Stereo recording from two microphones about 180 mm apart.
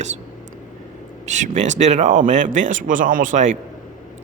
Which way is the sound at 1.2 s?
40° right (ahead or behind).